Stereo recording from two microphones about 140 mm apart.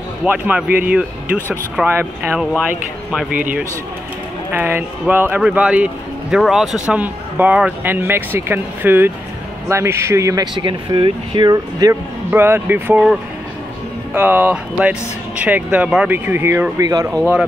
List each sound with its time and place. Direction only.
0.2 s speech: 10° right (ahead or behind)
4.5 s speech: 15° right (ahead or behind)
12.3 s speech: 15° right (ahead or behind)
16.8 s speech: 25° right (ahead or behind)
17.1 s speech: centre (ahead or behind)